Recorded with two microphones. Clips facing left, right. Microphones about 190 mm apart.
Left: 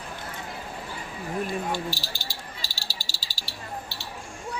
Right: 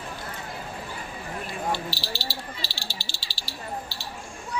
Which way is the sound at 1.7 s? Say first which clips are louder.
Even; 50° left (ahead or behind).